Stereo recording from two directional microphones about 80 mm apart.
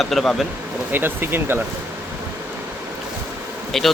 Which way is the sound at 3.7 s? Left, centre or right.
Centre.